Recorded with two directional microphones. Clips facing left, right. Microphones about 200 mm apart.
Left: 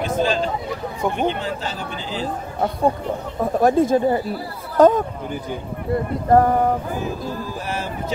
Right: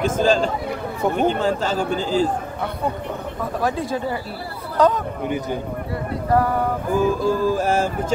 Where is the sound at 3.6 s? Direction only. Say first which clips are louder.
Left 8 dB; 50° left (ahead or behind).